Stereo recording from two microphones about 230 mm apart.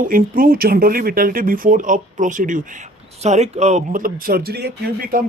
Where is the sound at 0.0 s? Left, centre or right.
Right.